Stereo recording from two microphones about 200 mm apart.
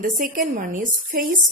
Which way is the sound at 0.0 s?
40° right (ahead or behind).